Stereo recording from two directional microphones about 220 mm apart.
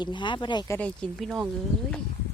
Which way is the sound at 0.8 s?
5° left (ahead or behind).